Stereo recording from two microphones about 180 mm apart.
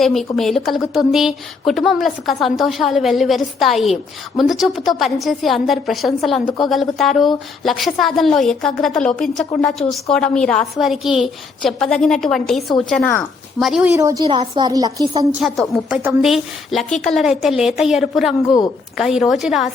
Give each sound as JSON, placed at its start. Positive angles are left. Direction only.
{"t": 0.0, "sound": "a woman's voice", "side_deg": 0}
{"t": 13.9, "sound": "a woman's voice", "side_deg": -15}
{"t": 15.3, "sound": "a woman's voice", "side_deg": -5}